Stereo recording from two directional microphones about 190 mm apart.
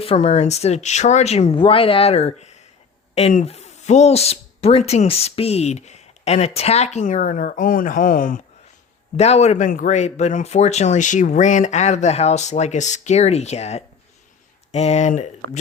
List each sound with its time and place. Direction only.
0.0 s speech: 30° left (ahead or behind)
9.1 s speech: 35° left (ahead or behind)